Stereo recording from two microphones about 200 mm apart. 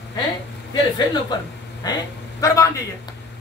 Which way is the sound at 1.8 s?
15° left (ahead or behind).